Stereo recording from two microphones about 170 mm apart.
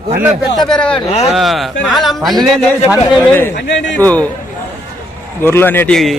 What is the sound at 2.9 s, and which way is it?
Speech, 15° left (ahead or behind).